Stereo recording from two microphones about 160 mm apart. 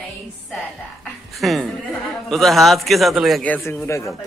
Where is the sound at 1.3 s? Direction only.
Centre (ahead or behind).